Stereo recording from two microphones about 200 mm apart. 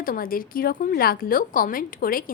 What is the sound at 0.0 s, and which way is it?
A woman's voice, 45° left (ahead or behind).